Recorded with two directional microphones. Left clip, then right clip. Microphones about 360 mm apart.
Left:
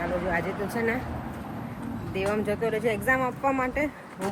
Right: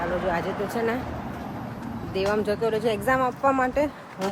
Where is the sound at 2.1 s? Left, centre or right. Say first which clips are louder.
Right 3 dB; centre.